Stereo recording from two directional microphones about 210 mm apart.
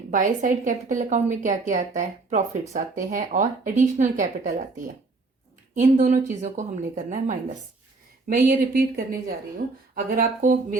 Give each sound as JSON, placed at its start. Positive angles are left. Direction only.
{"t": 0.1, "sound": "a woman's voice", "side_deg": -35}
{"t": 5.7, "sound": "a woman's voice", "side_deg": -40}
{"t": 9.9, "sound": "a woman's voice", "side_deg": -40}